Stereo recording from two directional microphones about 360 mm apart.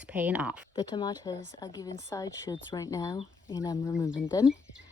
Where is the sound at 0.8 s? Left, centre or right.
Centre.